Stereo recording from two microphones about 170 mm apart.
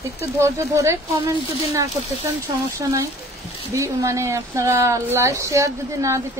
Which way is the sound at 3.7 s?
20° right (ahead or behind).